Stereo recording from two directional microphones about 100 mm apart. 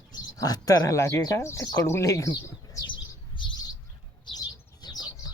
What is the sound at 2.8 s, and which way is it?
Bird, 50° left (ahead or behind).